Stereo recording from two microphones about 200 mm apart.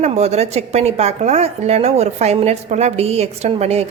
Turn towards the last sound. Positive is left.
turn(degrees=-30)  # may be behind; listen again after turning